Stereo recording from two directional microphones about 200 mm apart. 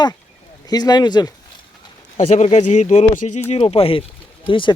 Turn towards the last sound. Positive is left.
turn(degrees=25)  # may be behind; listen again after turning